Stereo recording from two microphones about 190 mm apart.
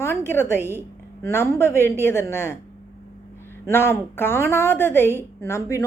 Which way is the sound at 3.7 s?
15° left (ahead or behind).